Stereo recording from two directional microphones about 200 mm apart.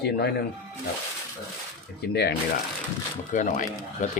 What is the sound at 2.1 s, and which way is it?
Speech, 55° left (ahead or behind).